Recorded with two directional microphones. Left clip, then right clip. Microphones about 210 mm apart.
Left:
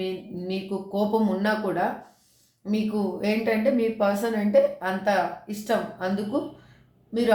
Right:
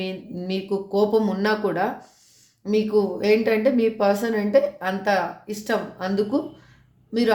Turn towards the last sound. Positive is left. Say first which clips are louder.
# right 2 dB
turn(degrees=-50)  # may be behind; listen again after turning